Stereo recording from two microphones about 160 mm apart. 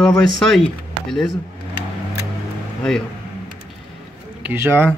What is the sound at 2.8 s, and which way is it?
Speech, 5° left (ahead or behind).